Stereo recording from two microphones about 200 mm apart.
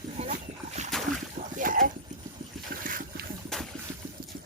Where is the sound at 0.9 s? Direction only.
Centre (ahead or behind).